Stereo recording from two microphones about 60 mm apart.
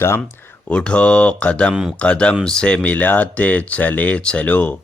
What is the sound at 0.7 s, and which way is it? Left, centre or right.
Speech, centre.